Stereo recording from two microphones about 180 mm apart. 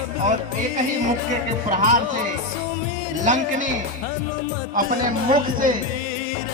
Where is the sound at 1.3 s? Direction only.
45° right (ahead or behind).